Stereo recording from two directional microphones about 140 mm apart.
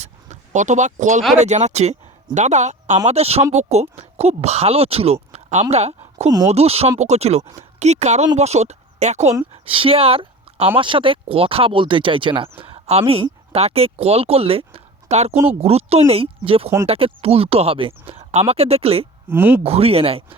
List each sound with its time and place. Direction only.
0.0 s a sound: 60° right (ahead or behind)
1.4 s speech: 55° right (ahead or behind)
9.6 s speech: 40° right (ahead or behind)
19.3 s speech: 15° right (ahead or behind)
19.6 s speech: 45° right (ahead or behind)